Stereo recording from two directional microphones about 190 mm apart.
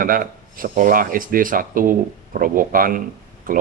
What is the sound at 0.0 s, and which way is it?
Speech, 50° right (ahead or behind).